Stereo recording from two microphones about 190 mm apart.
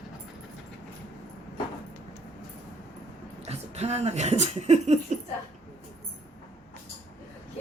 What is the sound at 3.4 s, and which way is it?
Speech, 35° right (ahead or behind).